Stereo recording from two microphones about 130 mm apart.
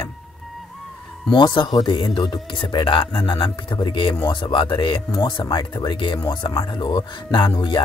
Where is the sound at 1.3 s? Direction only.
35° left (ahead or behind).